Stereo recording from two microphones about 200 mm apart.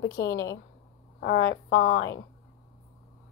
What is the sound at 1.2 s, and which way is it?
A woman's voice, 65° left (ahead or behind).